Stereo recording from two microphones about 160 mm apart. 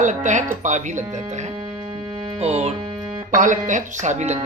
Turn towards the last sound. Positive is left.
turn(degrees=-45)  # may be behind; listen again after turning